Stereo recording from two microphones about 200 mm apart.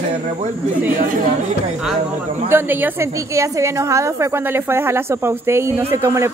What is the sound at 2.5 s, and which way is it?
A woman's voice, 10° right (ahead or behind).